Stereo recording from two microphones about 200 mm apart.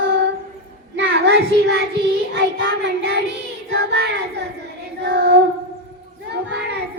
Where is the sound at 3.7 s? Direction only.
55° right (ahead or behind).